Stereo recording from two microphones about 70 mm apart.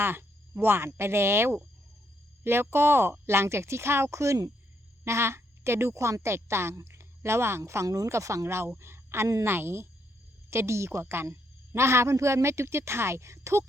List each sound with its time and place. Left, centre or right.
0.0 s a woman's voice: right